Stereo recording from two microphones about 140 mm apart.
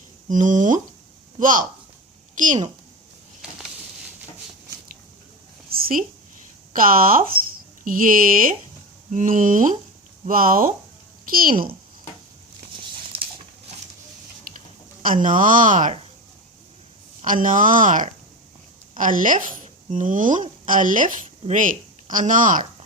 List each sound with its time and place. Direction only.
0.3 s speech: 65° right (ahead or behind)
5.7 s a sound: 80° right
6.7 s speech: 90° right
9.1 s speech: 70° right (ahead or behind)
10.2 s speech: 90° right
15.0 s speech: 70° right (ahead or behind)
17.2 s speech: 70° right (ahead or behind)